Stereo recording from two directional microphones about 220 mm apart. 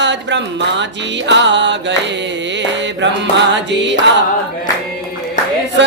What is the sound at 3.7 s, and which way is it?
Music, 55° right (ahead or behind).